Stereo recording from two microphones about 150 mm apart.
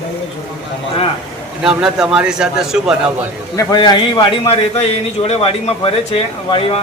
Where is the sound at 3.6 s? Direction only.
25° left (ahead or behind).